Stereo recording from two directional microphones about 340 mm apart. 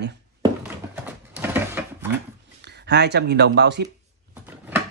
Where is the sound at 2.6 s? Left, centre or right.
Right.